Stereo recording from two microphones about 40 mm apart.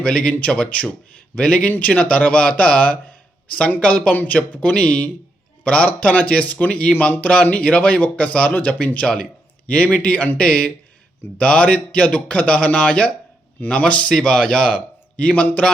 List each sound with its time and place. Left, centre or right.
0.0 s speech: left
14.1 s speech: centre